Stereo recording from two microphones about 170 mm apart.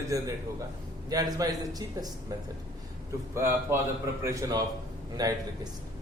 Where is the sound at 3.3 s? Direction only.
15° right (ahead or behind).